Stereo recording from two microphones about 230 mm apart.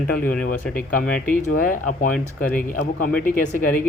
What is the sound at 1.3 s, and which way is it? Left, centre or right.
Speech, left.